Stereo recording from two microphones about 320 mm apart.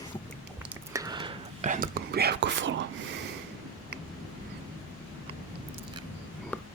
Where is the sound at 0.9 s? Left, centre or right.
Centre; by 2.7 s right.